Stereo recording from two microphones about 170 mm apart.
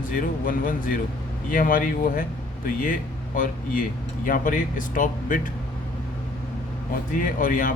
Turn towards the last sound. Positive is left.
turn(degrees=55)  # may be behind; listen again after turning